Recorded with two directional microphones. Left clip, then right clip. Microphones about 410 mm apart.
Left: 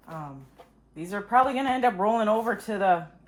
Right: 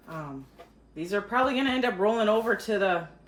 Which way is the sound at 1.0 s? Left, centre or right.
Centre.